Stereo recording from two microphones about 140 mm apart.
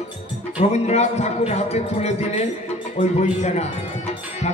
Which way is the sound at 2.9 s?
55° left (ahead or behind).